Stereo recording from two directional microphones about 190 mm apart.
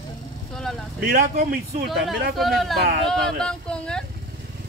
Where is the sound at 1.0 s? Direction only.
50° right (ahead or behind).